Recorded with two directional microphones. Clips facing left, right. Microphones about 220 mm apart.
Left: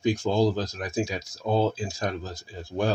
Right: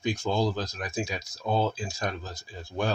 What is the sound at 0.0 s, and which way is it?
Speech, 35° left (ahead or behind).